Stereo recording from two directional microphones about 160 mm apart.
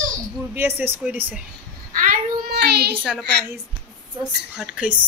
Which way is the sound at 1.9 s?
60° right (ahead or behind).